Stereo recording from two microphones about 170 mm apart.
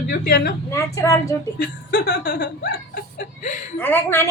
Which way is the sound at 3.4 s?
50° left (ahead or behind).